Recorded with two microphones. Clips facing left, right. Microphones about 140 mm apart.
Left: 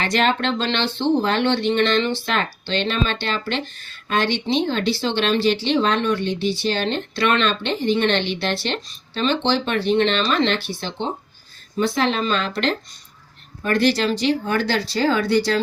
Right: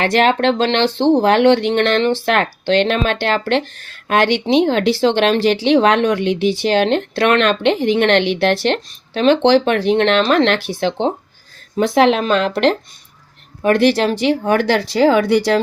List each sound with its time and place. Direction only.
0.0 s speech: 65° right (ahead or behind)
4.1 s speech: 85° right
11.9 s speech: 70° right (ahead or behind)